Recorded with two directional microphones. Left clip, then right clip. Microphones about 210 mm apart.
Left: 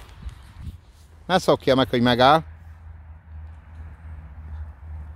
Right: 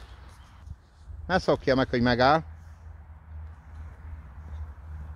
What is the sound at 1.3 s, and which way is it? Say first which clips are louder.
Speech: left 5 dB; 20° left (ahead or behind).